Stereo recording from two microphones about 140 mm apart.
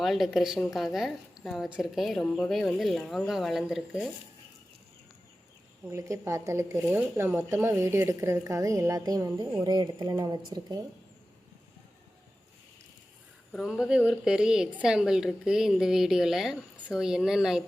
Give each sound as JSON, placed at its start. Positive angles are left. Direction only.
{"t": 0.0, "sound": "a woman's voice", "side_deg": 0}
{"t": 5.8, "sound": "speech", "side_deg": -20}
{"t": 13.5, "sound": "a woman's voice", "side_deg": 0}